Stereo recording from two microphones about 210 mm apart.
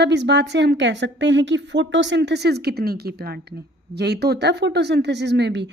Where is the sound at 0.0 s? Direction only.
55° right (ahead or behind).